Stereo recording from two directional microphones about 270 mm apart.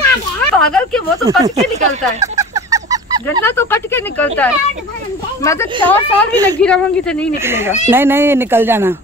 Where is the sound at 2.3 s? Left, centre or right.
Centre.